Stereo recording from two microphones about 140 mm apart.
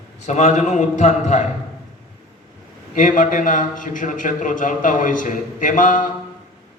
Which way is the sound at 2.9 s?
75° left (ahead or behind).